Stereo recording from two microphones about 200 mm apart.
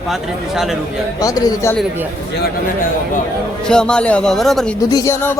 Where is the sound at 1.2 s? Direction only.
20° left (ahead or behind).